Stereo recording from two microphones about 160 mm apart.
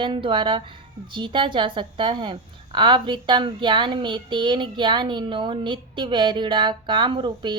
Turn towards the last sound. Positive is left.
turn(degrees=-30)  # may be behind; listen again after turning